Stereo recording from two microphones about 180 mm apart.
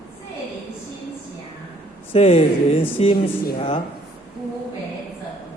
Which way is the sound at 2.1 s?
35° left (ahead or behind).